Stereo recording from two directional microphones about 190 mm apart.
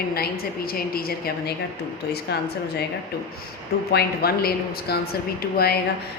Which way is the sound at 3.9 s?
55° left (ahead or behind).